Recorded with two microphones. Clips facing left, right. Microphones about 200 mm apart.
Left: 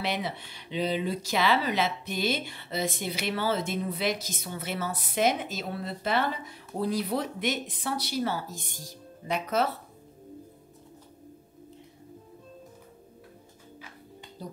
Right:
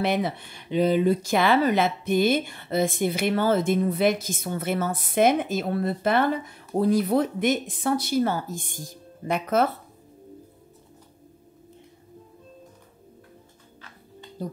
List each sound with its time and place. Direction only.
0.0 s speech: 50° right (ahead or behind)
14.4 s speech: 50° right (ahead or behind)